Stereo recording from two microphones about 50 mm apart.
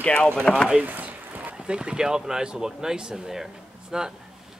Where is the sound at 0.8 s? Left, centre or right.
Right.